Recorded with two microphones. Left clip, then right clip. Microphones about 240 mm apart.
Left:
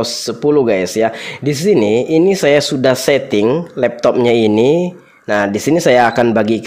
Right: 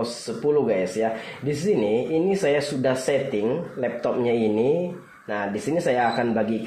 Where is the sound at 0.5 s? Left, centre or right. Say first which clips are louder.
Left 9 dB; left.